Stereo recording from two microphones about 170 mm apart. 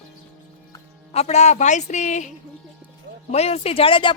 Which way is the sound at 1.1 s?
40° left (ahead or behind).